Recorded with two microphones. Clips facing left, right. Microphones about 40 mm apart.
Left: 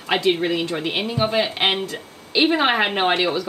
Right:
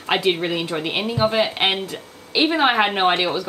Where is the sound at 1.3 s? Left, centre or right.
Right.